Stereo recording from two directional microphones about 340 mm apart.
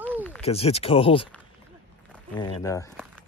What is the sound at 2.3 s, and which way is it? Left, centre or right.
Speech, centre.